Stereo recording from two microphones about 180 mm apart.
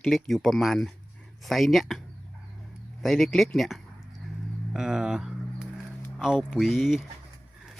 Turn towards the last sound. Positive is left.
turn(degrees=0)  # may be behind; listen again after turning